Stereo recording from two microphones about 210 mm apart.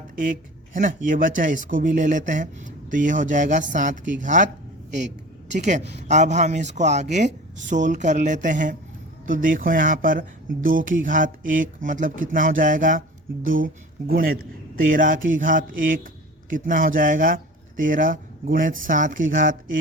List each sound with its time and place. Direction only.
0.2 s speech: 40° right (ahead or behind)
5.5 s speech: 35° right (ahead or behind)